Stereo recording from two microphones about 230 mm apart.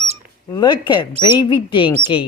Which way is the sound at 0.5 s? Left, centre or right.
Centre.